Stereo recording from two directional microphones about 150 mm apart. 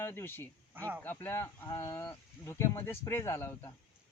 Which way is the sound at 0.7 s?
15° right (ahead or behind).